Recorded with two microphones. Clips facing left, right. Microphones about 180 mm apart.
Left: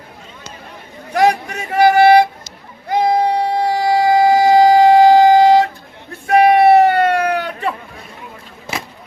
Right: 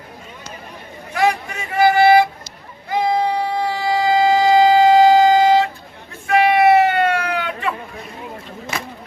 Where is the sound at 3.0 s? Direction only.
65° left (ahead or behind).